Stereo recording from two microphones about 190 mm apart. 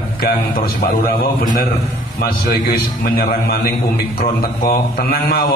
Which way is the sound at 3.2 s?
50° left (ahead or behind).